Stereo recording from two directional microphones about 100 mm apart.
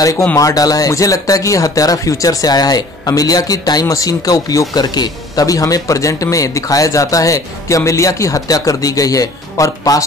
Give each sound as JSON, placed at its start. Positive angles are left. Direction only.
{"t": 0.0, "sound": "speech", "side_deg": 30}
{"t": 0.5, "sound": "speech", "side_deg": 40}